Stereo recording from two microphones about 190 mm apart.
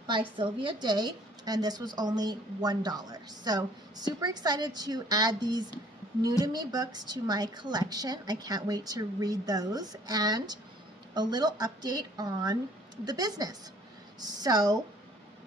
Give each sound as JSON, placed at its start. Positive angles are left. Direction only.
{"t": 0.0, "sound": "a woman's voice", "side_deg": -25}